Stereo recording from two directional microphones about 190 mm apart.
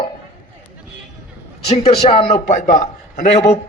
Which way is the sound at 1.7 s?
35° left (ahead or behind).